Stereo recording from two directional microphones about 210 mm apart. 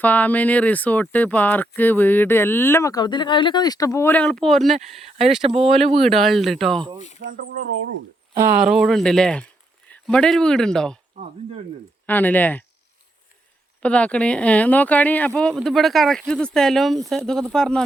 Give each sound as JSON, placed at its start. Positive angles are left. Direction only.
{"t": 0.0, "sound": "speech", "side_deg": 5}
{"t": 5.0, "sound": "speech", "side_deg": -30}
{"t": 6.0, "sound": "speech", "side_deg": 0}
{"t": 7.3, "sound": "speech", "side_deg": -40}
{"t": 8.4, "sound": "speech", "side_deg": -5}
{"t": 12.0, "sound": "speech", "side_deg": 10}
{"t": 13.8, "sound": "speech", "side_deg": 5}